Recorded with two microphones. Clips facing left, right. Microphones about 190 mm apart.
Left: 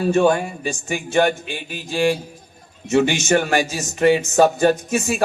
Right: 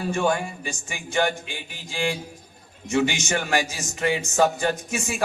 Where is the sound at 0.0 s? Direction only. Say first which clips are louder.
Left 7 dB; 60° left (ahead or behind).